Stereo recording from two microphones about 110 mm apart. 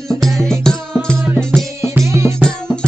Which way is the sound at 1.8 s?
25° right (ahead or behind).